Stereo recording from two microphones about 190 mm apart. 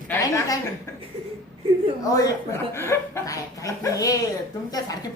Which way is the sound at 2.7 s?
15° left (ahead or behind).